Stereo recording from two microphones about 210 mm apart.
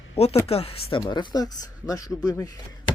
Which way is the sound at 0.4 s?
30° left (ahead or behind).